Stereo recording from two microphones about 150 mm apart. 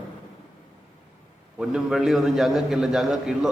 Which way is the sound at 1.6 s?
5° right (ahead or behind).